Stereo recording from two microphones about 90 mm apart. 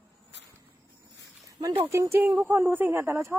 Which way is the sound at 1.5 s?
40° right (ahead or behind).